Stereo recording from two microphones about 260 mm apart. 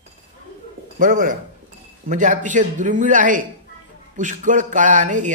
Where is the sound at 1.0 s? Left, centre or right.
Right.